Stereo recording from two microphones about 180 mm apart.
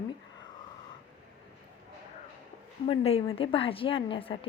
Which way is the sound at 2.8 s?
35° left (ahead or behind).